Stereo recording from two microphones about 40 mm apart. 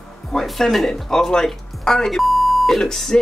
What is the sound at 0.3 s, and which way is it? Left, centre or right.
Speech, centre.